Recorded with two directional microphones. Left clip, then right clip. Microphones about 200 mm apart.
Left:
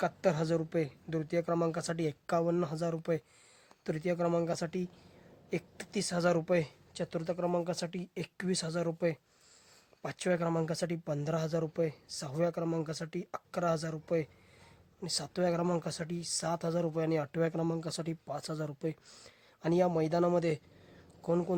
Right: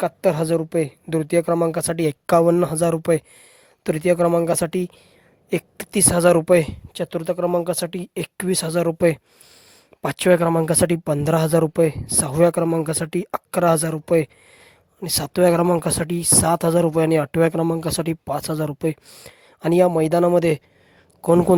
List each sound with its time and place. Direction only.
0.0 s speech: 45° right (ahead or behind)